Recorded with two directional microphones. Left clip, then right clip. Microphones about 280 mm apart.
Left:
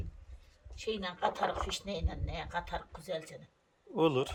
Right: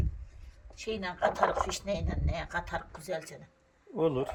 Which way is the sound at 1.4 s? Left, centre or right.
Centre.